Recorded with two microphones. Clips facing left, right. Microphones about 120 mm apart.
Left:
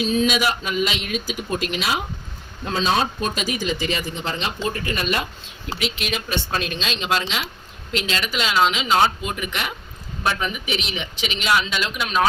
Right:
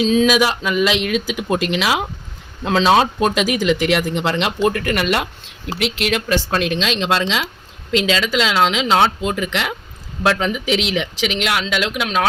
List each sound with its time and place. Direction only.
0.1 s speech: 90° right